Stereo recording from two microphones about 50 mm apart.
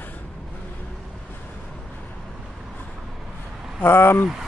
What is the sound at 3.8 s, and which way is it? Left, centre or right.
Speech, left.